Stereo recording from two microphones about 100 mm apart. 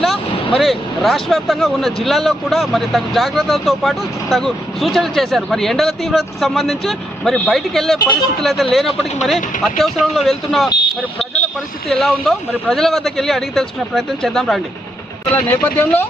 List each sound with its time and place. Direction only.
0.6 s speech: centre (ahead or behind)
11.9 s speech: 5° left (ahead or behind)
15.3 s speech: 20° left (ahead or behind)